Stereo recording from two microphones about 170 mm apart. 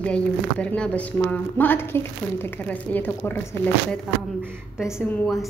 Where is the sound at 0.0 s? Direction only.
5° left (ahead or behind).